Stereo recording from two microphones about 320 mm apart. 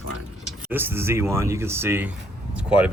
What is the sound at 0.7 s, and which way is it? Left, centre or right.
Speech, centre.